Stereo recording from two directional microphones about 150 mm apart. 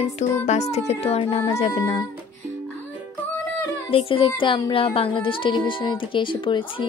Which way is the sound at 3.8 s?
40° left (ahead or behind).